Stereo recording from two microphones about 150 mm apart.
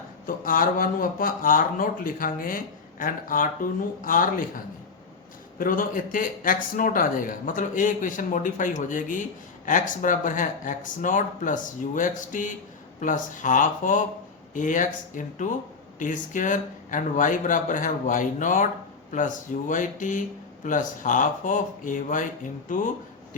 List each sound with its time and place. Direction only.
0.3 s a man's voice: 65° left (ahead or behind)